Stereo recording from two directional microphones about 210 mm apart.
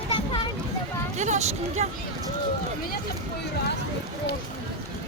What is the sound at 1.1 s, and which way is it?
Speech, 35° right (ahead or behind).